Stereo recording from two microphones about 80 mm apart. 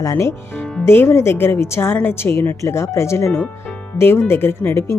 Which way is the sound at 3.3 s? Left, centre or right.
Centre.